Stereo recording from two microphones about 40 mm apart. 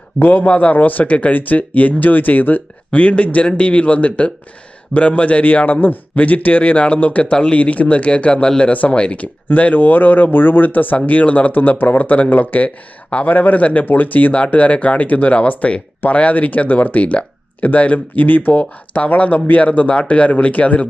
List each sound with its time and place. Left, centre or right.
0.2 s speech: left
0.4 s speech: left
8.7 s speech: left
9.5 s speech: left
13.2 s speech: left